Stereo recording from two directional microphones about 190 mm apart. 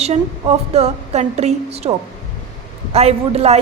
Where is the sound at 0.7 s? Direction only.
35° right (ahead or behind).